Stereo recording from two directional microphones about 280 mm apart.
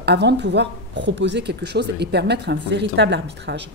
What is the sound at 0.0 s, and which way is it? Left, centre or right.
A woman's voice, right.